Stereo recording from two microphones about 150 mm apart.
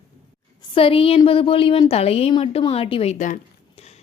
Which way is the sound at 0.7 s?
35° left (ahead or behind).